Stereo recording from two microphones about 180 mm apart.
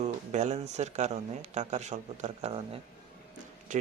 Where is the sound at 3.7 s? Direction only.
45° right (ahead or behind).